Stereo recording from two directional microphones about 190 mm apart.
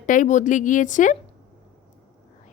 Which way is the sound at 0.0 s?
40° left (ahead or behind).